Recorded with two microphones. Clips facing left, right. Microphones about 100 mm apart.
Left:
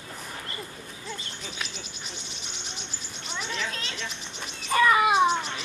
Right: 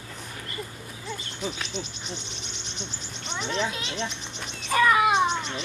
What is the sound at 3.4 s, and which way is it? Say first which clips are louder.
Speech: right 5 dB; 30° right (ahead or behind).